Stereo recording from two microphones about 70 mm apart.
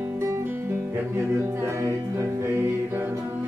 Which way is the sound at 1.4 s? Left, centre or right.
Right.